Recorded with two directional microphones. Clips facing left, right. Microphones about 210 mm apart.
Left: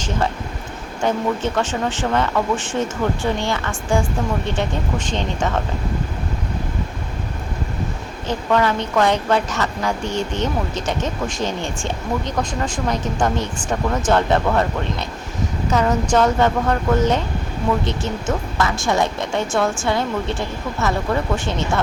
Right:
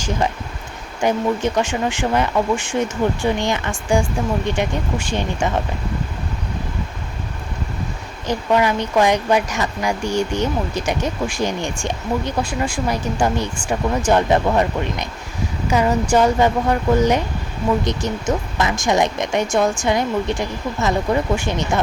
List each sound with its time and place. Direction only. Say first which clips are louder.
1.0 s a woman's voice: right 2 dB; 15° right (ahead or behind)
8.3 s a woman's voice: right 1 dB; 10° right (ahead or behind)